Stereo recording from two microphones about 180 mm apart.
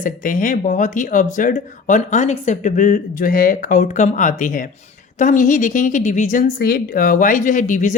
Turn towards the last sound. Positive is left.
turn(degrees=45)  # may be behind; listen again after turning